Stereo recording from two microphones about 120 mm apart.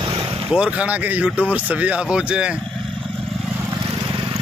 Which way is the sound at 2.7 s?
Centre (ahead or behind).